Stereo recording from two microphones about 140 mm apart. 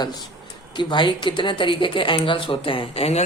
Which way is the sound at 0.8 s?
35° left (ahead or behind).